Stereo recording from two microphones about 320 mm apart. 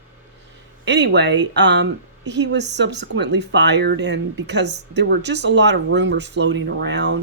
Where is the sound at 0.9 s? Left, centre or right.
Right.